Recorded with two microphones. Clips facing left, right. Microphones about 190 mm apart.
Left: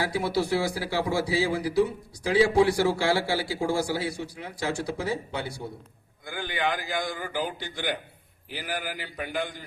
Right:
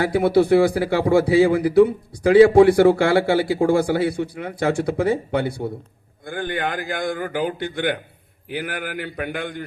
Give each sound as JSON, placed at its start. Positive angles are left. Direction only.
{"t": 0.0, "sound": "a man's voice", "side_deg": -55}